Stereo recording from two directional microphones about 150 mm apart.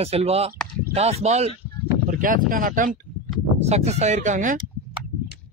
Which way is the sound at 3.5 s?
45° right (ahead or behind).